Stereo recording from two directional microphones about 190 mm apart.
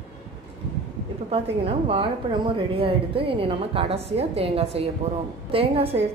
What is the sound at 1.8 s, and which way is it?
A woman's voice, 25° right (ahead or behind).